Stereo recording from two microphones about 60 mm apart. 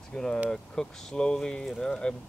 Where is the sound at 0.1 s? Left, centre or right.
Centre.